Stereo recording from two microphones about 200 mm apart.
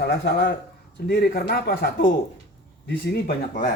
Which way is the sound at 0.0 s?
50° left (ahead or behind).